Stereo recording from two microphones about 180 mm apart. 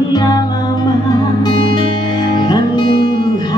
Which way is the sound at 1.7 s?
25° left (ahead or behind).